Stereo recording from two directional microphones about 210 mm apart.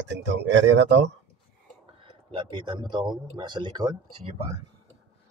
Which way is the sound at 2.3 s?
20° right (ahead or behind).